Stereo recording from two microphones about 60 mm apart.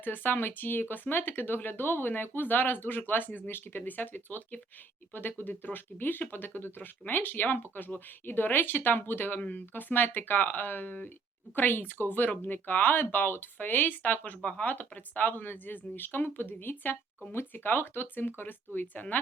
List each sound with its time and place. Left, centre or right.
0.0 s speech: left